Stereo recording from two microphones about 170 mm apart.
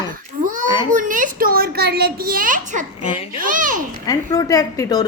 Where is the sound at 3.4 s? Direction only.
50° right (ahead or behind).